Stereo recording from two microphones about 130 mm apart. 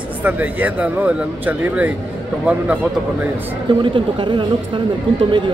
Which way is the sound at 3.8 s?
40° right (ahead or behind).